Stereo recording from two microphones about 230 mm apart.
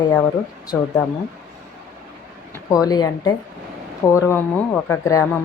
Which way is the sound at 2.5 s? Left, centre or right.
Centre.